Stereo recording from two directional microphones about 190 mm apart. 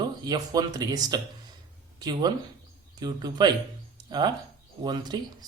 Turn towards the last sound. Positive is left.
turn(degrees=-20)  # may be behind; listen again after turning